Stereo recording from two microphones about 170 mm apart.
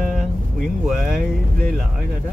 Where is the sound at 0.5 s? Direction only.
Centre (ahead or behind).